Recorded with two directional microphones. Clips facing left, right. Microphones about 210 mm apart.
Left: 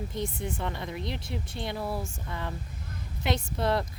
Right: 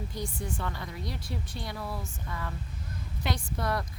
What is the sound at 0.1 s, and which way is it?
A woman's voice, 20° left (ahead or behind).